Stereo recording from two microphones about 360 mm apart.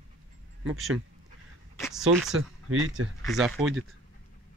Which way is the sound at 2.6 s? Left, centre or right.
Right.